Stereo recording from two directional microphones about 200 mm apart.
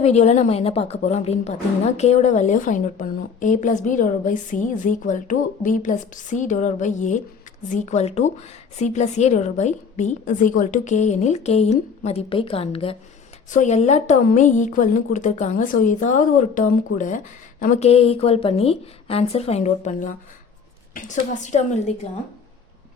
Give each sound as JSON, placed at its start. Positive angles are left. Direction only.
{"t": 0.0, "sound": "a woman's voice", "side_deg": 35}